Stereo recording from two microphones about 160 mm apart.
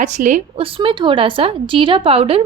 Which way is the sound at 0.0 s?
50° right (ahead or behind).